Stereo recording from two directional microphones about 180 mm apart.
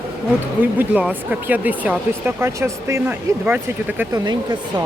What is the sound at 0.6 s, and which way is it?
Speech, 10° right (ahead or behind).